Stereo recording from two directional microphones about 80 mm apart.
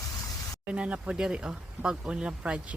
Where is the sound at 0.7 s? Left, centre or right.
Centre.